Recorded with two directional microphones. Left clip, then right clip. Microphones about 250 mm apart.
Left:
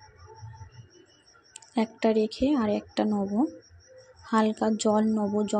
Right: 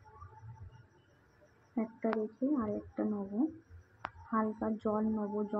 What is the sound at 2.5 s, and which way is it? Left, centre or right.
Speech, left.